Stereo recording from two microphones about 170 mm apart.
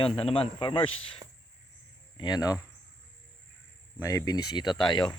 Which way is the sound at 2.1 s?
25° left (ahead or behind).